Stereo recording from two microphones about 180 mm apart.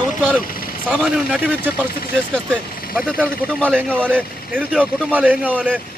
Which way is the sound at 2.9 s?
5° left (ahead or behind).